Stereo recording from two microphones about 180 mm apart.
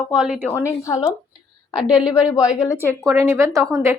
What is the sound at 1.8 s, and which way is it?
Speech, 5° right (ahead or behind).